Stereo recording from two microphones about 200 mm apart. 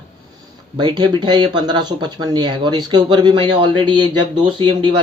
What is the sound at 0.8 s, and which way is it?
Speech, 25° right (ahead or behind).